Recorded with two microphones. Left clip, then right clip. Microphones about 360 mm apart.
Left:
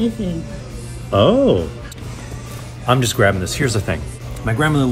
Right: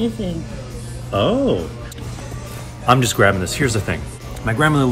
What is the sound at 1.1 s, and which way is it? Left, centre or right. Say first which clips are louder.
Speech: left 4 dB; left.